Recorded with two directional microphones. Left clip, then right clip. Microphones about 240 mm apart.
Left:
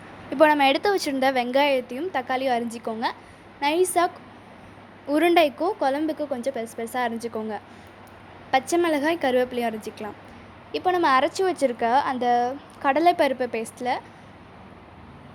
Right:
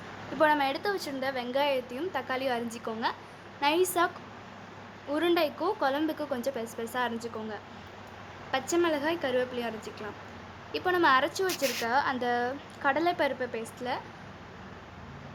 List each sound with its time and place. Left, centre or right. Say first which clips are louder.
0.3 s a woman's voice: left 8 dB; left
5.1 s a woman's voice: left 8 dB; left
8.7 s a woman's voice: left 6 dB; left